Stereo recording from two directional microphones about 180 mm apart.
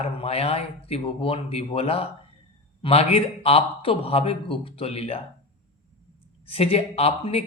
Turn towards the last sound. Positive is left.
turn(degrees=35)  # may be behind; listen again after turning